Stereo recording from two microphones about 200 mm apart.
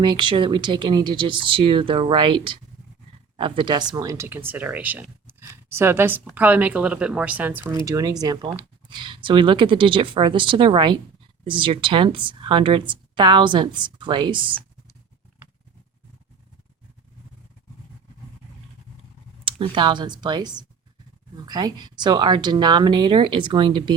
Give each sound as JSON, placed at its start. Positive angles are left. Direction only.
{"t": 0.0, "sound": "speech", "side_deg": -25}
{"t": 19.5, "sound": "speech", "side_deg": -25}